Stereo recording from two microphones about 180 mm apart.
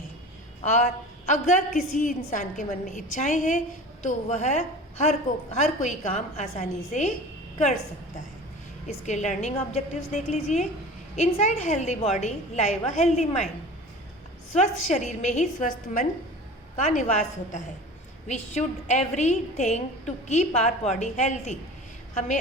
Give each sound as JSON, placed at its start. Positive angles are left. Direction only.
{"t": 0.6, "sound": "a woman's voice", "side_deg": 40}
{"t": 9.0, "sound": "a woman's voice", "side_deg": 40}
{"t": 14.5, "sound": "a woman's voice", "side_deg": 40}
{"t": 18.3, "sound": "a woman's voice", "side_deg": 40}